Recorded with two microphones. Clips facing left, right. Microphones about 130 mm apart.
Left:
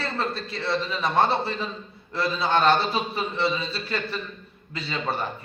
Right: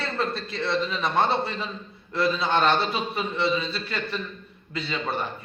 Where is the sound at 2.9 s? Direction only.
35° left (ahead or behind).